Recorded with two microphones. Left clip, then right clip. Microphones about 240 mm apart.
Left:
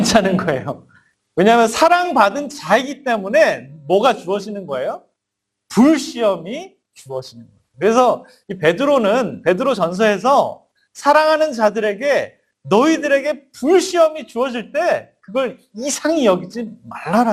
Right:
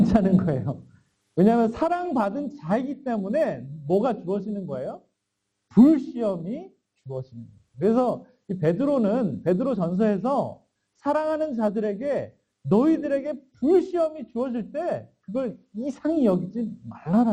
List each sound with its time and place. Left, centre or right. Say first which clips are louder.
0.0 s a man's voice: left 8 dB; centre
1.4 s a man's voice: left 10 dB; centre
4.5 s a man's voice: left 10 dB; left
6.0 s a man's voice: left 10 dB; centre
7.9 s a man's voice: left 10 dB; left
8.3 s a man's voice: left 9 dB; centre
10.2 s a man's voice: left 11 dB; left
11.0 s a man's voice: left 12 dB; centre
11.3 s a man's voice: left 10 dB; centre
11.7 s a man's voice: left 9 dB; centre